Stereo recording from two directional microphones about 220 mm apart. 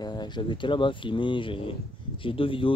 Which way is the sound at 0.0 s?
20° left (ahead or behind).